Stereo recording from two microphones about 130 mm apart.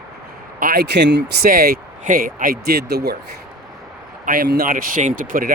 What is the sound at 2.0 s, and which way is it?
Speech, 90° right.